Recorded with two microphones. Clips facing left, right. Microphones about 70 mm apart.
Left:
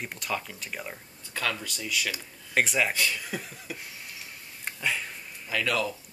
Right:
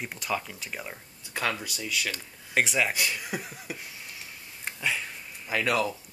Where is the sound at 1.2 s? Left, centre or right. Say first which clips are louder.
Right 1 dB; right.